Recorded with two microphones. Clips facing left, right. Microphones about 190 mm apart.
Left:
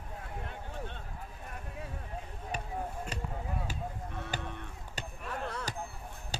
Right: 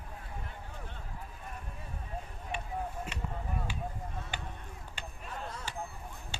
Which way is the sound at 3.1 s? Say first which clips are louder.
Left 2 dB; 35° left (ahead or behind).